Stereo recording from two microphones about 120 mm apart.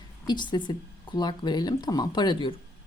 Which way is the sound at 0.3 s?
40° left (ahead or behind).